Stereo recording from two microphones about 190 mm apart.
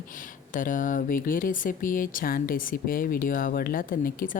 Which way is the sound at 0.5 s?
45° left (ahead or behind).